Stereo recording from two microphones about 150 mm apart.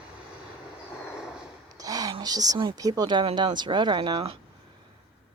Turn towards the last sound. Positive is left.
turn(degrees=-30)  # may be behind; listen again after turning